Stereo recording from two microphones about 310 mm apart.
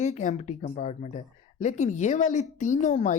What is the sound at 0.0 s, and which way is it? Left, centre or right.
A woman's voice, left.